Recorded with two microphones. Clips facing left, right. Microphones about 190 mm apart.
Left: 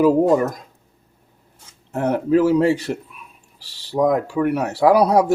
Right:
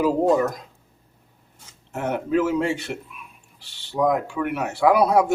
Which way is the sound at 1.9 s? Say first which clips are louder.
Left 6 dB; 35° left (ahead or behind).